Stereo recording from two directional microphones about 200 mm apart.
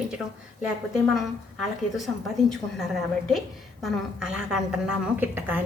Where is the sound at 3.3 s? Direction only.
Centre (ahead or behind).